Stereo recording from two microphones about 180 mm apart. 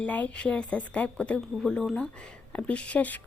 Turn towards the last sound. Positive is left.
turn(degrees=10)  # may be behind; listen again after turning